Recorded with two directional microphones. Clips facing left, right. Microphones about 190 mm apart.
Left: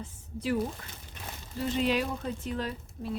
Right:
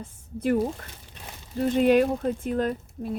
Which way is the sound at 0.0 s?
55° right (ahead or behind).